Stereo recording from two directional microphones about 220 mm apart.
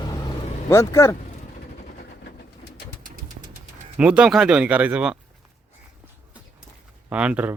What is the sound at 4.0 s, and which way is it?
Speech, 5° right (ahead or behind).